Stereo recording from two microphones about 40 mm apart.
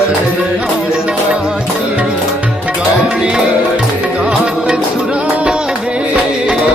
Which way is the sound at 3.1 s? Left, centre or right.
Right.